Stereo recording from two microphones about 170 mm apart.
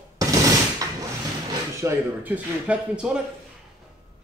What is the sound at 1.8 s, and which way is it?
Speech, 15° right (ahead or behind).